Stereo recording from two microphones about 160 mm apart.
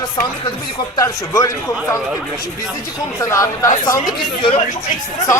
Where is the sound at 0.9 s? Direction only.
20° left (ahead or behind).